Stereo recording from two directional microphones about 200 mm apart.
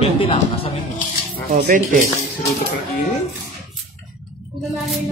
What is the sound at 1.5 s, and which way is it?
Speech, 40° right (ahead or behind).